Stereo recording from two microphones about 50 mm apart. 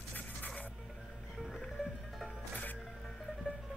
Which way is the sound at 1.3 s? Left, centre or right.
Centre.